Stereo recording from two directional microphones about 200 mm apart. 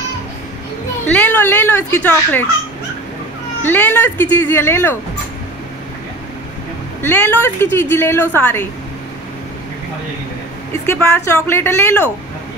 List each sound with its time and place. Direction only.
1.0 s a woman's voice: 5° left (ahead or behind)
3.6 s a woman's voice: 10° left (ahead or behind)
7.0 s a woman's voice: 10° left (ahead or behind)
10.9 s a woman's voice: 10° left (ahead or behind)